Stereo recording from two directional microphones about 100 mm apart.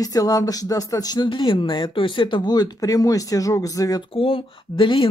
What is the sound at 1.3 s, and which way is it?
Speech, 55° left (ahead or behind).